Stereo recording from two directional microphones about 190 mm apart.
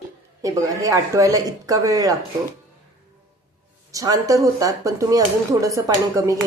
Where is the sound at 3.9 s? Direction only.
20° right (ahead or behind).